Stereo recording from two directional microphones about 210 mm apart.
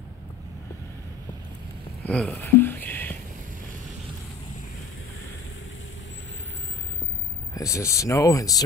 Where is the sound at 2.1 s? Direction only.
5° left (ahead or behind).